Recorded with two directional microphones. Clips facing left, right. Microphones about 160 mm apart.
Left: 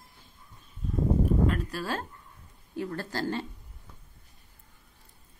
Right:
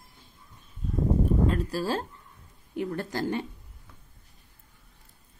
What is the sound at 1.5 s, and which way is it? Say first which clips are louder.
Speech: right 3 dB; 30° right (ahead or behind).